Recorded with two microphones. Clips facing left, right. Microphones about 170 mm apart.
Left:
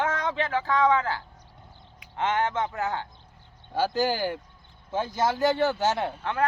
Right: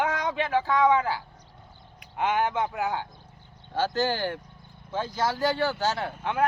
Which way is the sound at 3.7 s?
10° left (ahead or behind).